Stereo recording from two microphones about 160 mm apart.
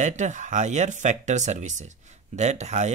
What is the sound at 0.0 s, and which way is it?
Speech, 50° right (ahead or behind).